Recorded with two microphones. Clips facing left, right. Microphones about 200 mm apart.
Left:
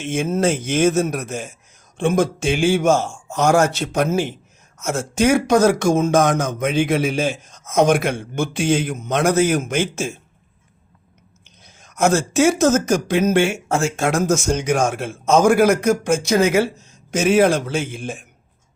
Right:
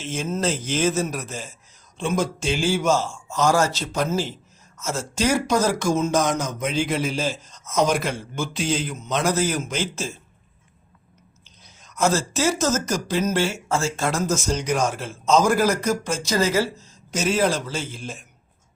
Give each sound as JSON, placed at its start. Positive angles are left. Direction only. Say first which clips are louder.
{"t": 0.0, "sound": "speech", "louder": "left 6 dB", "side_deg": 55}
{"t": 2.0, "sound": "speech", "louder": "left 6 dB", "side_deg": 55}
{"t": 11.4, "sound": "speech", "louder": "left 3 dB", "side_deg": 55}